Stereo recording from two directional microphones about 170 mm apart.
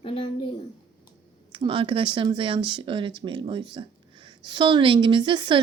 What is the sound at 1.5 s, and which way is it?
Speech, 30° right (ahead or behind).